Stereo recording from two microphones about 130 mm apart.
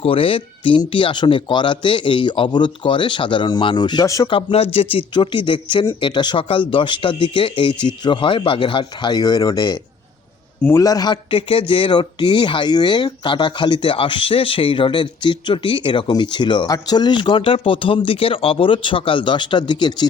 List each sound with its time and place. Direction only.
0.0 s speech: 45° left (ahead or behind); by 4.3 s 25° left (ahead or behind)
4.3 s speech: 40° left (ahead or behind)
10.8 s speech: 30° left (ahead or behind)